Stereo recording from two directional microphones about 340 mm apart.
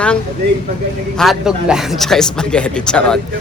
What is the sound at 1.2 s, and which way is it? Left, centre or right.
A woman's voice, centre.